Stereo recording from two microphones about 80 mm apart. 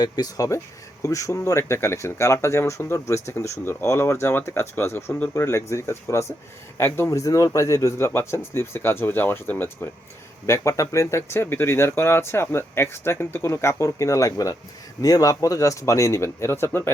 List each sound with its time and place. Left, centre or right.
0.0 s speech: left
1.0 s speech: left